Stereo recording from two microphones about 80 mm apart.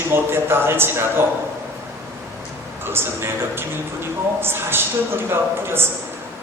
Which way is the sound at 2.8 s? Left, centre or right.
Right.